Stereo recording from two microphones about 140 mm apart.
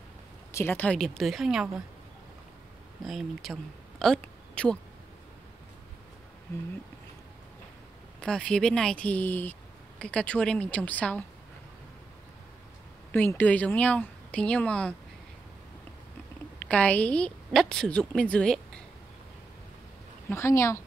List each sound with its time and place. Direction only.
0.5 s speech: 15° left (ahead or behind); by 1.8 s 5° right (ahead or behind)
3.0 s speech: centre (ahead or behind)
4.2 s a sound: 10° left (ahead or behind)
8.2 s speech: 5° left (ahead or behind)
13.1 s speech: 10° left (ahead or behind)
16.6 s speech: 10° left (ahead or behind)
20.2 s a woman's voice: 20° left (ahead or behind)